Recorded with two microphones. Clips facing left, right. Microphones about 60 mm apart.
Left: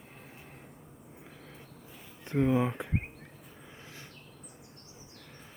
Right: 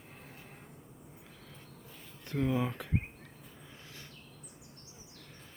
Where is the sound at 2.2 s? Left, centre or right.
Left.